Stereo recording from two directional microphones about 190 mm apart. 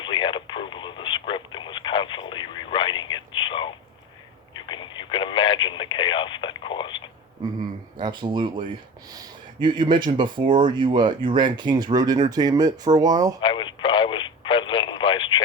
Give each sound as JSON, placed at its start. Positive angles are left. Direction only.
{"t": 0.0, "sound": "radio", "side_deg": 25}
{"t": 7.9, "sound": "speech", "side_deg": -25}
{"t": 13.4, "sound": "a sound", "side_deg": 25}